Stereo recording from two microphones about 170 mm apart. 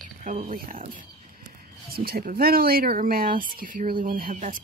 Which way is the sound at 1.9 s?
60° right (ahead or behind).